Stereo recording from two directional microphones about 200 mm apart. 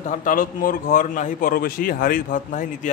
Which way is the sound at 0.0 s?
40° left (ahead or behind).